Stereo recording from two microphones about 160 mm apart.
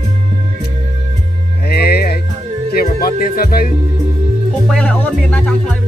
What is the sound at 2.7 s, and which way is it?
Music, 65° left (ahead or behind).